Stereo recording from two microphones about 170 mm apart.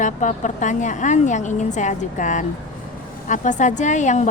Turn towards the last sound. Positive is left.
turn(degrees=45)  # may be behind; listen again after turning